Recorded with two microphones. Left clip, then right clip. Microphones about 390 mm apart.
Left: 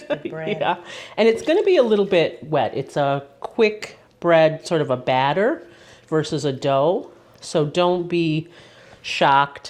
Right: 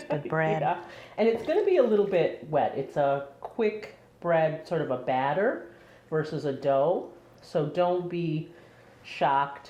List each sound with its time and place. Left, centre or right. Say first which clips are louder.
0.3 s speech: right 1 dB; right
0.6 s speech: left 6 dB; left